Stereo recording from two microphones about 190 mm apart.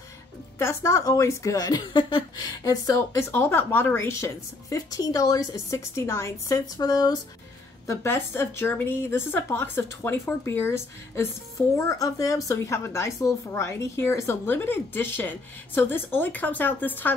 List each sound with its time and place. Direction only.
0.6 s a woman's voice: 15° left (ahead or behind)